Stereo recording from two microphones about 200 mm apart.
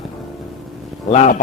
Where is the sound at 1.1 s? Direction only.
35° left (ahead or behind).